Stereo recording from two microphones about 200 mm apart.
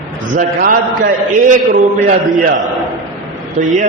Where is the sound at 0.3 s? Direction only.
45° right (ahead or behind).